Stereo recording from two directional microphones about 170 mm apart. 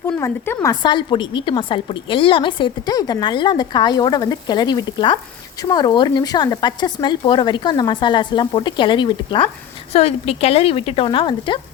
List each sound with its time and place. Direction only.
0.2 s a woman's voice: 20° left (ahead or behind)